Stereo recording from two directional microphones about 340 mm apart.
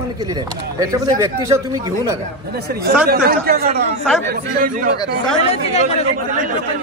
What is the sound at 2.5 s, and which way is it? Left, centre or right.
Speech, right.